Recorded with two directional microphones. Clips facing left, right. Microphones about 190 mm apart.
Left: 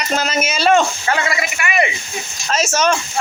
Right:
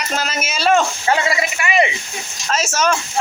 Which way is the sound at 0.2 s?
5° right (ahead or behind).